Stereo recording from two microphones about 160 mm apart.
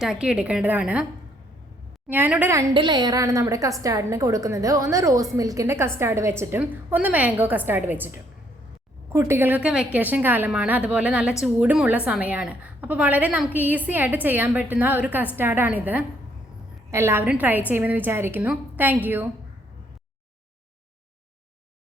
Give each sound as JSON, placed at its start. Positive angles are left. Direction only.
{"t": 0.0, "sound": "a woman's voice", "side_deg": -5}
{"t": 2.0, "sound": "a woman's voice", "side_deg": -10}
{"t": 2.7, "sound": "a woman's voice", "side_deg": -30}